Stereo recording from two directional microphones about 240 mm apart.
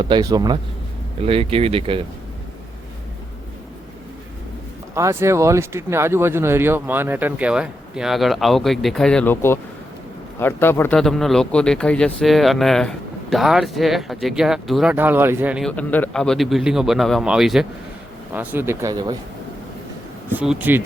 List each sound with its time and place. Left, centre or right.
0.0 s speech: centre
4.9 s speech: centre
20.3 s speech: centre